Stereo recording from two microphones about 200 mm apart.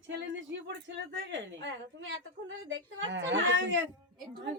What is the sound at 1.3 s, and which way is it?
A woman's voice, 65° right (ahead or behind).